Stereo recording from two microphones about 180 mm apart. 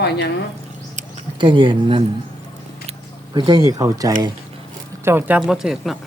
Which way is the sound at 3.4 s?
25° right (ahead or behind).